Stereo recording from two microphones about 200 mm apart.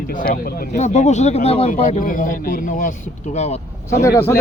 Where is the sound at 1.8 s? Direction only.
40° left (ahead or behind).